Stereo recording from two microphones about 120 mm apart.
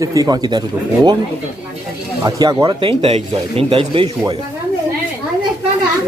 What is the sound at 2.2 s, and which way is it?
Speech, 35° right (ahead or behind).